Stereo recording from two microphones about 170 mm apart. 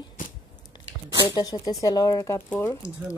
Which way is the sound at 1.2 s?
25° left (ahead or behind).